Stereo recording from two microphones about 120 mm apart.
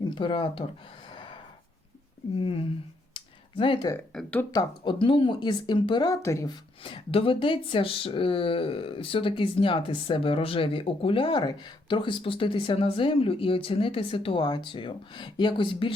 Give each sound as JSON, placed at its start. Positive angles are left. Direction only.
{"t": 0.1, "sound": "speech", "side_deg": 45}
{"t": 1.1, "sound": "a sound", "side_deg": 45}
{"t": 2.4, "sound": "speech", "side_deg": 50}
{"t": 3.2, "sound": "a sound", "side_deg": 40}
{"t": 4.1, "sound": "speech", "side_deg": 5}
{"t": 4.5, "sound": "speech", "side_deg": 45}
{"t": 6.2, "sound": "speech", "side_deg": 25}
{"t": 6.5, "sound": "speech", "side_deg": 45}